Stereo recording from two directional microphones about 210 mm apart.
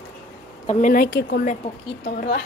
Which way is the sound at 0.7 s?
35° left (ahead or behind).